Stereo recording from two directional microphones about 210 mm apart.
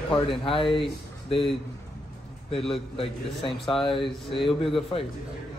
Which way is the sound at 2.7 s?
25° left (ahead or behind).